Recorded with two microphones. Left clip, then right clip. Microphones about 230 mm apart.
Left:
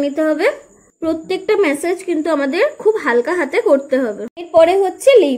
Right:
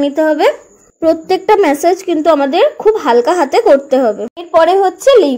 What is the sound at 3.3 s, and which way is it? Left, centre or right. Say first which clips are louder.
Speech: right 6 dB; right.